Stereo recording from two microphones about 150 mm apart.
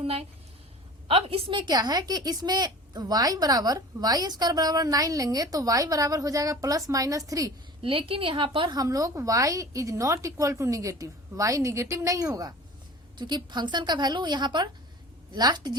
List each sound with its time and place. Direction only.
0.0 s a woman's voice: 40° right (ahead or behind); by 7.5 s 25° right (ahead or behind)
7.9 s a woman's voice: 35° right (ahead or behind)